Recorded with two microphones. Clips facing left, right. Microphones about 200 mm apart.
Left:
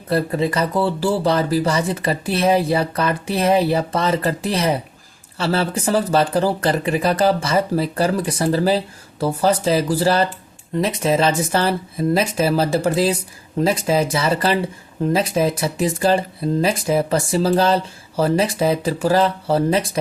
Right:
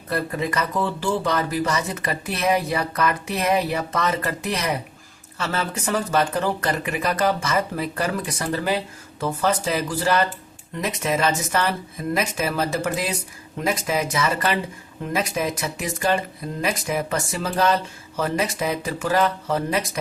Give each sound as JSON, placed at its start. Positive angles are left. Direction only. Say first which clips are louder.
{"t": 0.1, "sound": "speech", "louder": "left 6 dB", "side_deg": 30}